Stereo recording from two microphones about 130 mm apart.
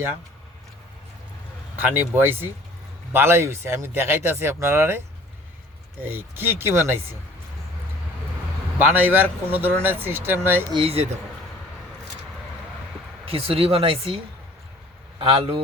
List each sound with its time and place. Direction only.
1.7 s speech: 15° right (ahead or behind)
8.9 s speech: 15° right (ahead or behind)
10.7 s speech: 45° right (ahead or behind)
13.2 s speech: 45° right (ahead or behind)
15.2 s speech: 45° right (ahead or behind)